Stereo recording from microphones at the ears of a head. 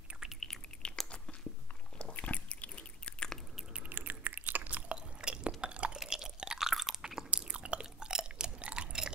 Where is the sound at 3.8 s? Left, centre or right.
Right.